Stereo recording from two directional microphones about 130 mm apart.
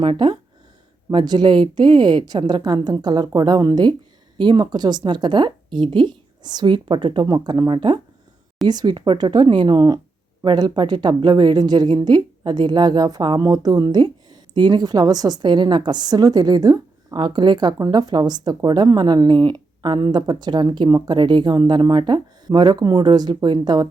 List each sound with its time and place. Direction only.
0.0 s a woman's voice: 40° right (ahead or behind)